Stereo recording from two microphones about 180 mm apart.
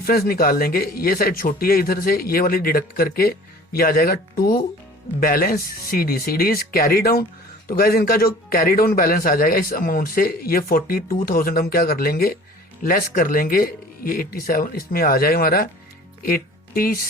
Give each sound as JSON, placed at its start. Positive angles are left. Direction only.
{"t": 0.0, "sound": "a man's voice", "side_deg": 55}